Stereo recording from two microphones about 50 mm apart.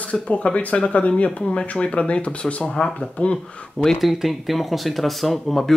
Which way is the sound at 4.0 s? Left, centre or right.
Centre.